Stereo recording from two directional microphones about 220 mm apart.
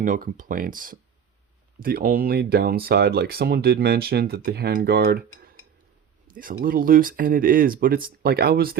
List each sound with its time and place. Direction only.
0.0 s speech: 35° right (ahead or behind)